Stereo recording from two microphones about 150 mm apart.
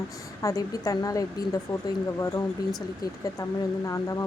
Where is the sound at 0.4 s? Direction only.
25° left (ahead or behind).